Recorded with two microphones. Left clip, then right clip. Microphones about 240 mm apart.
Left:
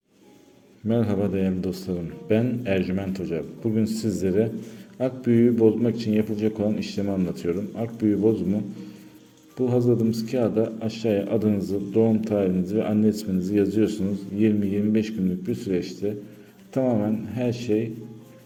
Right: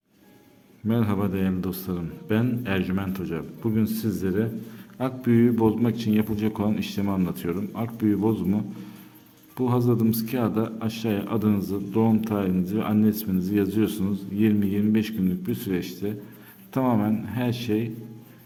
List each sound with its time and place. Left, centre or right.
0.9 s speech: centre
9.6 s a man's voice: right